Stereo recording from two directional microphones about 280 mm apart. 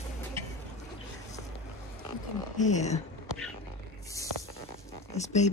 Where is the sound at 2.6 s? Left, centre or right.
Left.